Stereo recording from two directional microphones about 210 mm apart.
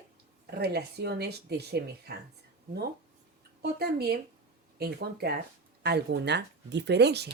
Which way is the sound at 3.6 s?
50° right (ahead or behind).